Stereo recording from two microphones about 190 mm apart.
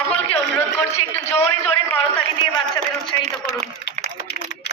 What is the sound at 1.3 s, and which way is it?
Speech, 10° left (ahead or behind).